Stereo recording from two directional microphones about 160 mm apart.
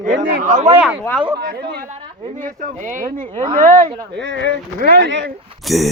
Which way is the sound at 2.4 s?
55° right (ahead or behind).